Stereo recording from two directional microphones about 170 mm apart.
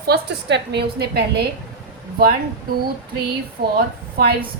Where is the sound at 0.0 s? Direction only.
80° right.